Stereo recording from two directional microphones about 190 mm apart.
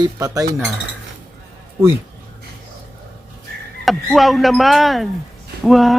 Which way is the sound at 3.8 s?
Centre (ahead or behind).